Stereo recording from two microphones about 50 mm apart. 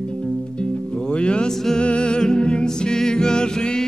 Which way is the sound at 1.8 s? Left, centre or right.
Centre.